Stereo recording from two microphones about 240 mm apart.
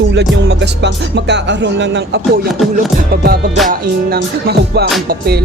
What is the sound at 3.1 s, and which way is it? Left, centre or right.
Music, right.